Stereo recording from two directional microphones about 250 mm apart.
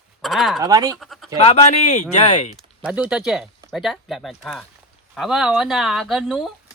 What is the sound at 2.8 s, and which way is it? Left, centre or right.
Speech, centre.